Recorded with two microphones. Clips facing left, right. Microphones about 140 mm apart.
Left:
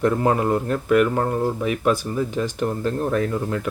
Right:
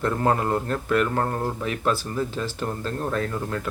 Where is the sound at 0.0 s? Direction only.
15° left (ahead or behind).